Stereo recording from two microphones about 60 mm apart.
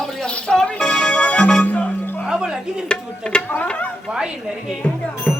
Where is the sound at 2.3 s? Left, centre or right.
Centre.